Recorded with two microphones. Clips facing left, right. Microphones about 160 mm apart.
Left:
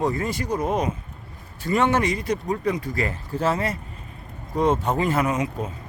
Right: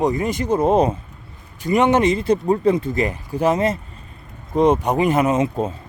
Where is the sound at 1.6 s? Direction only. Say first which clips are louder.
Right 5 dB; 15° right (ahead or behind).